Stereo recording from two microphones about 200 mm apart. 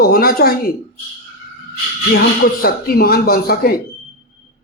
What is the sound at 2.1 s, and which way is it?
Speech, 50° left (ahead or behind).